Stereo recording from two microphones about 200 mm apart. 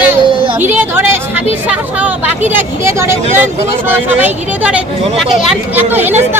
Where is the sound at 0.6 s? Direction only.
10° right (ahead or behind).